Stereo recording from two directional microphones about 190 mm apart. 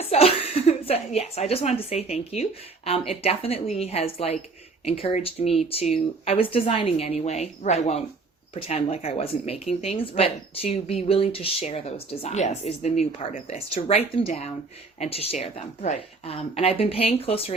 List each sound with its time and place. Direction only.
0.1 s a woman's voice: 30° left (ahead or behind)